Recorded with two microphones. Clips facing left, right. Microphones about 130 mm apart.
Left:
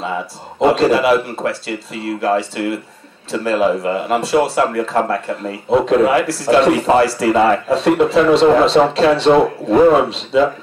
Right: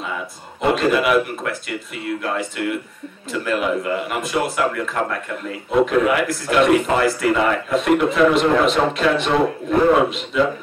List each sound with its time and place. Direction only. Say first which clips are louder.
0.6 s a man's voice: left 5 dB; 30° left (ahead or behind)